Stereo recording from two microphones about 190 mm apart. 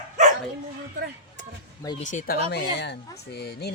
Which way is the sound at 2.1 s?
45° left (ahead or behind).